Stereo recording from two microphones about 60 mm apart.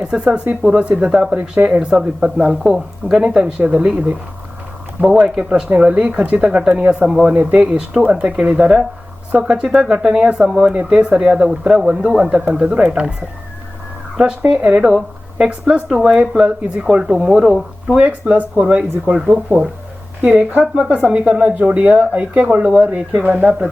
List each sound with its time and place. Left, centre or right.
0.0 s speech: centre
5.4 s speech: centre
8.0 s speech: right
14.5 s speech: centre
17.9 s speech: right